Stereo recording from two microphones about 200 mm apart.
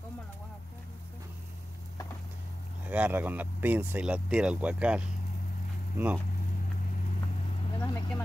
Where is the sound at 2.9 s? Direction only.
10° right (ahead or behind).